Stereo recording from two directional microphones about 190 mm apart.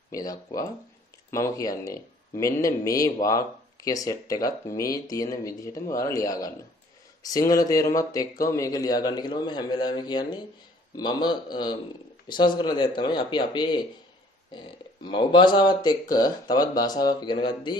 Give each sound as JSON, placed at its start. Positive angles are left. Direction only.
{"t": 0.1, "sound": "speech", "side_deg": 20}